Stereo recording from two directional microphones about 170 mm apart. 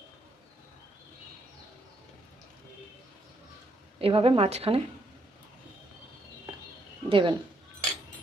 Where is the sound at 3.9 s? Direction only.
35° right (ahead or behind).